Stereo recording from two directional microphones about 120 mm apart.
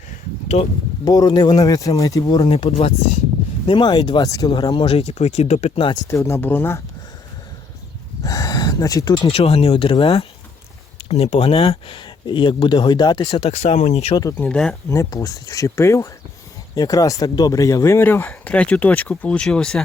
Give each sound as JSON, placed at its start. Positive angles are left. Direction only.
{"t": 1.0, "sound": "speech", "side_deg": 35}
{"t": 2.5, "sound": "speech", "side_deg": 45}
{"t": 4.7, "sound": "speech", "side_deg": 50}
{"t": 5.9, "sound": "speech", "side_deg": 25}
{"t": 8.2, "sound": "a sound", "side_deg": 30}
{"t": 9.2, "sound": "speech", "side_deg": 55}
{"t": 13.4, "sound": "speech", "side_deg": 60}
{"t": 14.3, "sound": "speech", "side_deg": 10}
{"t": 14.8, "sound": "speech", "side_deg": 25}
{"t": 18.3, "sound": "speech", "side_deg": 10}